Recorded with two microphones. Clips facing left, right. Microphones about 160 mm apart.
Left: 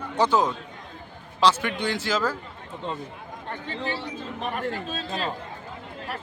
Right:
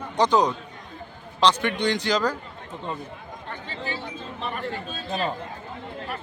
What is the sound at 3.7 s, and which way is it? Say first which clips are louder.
Speech: left 3 dB; 70° left (ahead or behind).